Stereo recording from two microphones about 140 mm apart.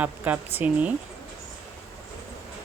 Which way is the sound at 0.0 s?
10° right (ahead or behind).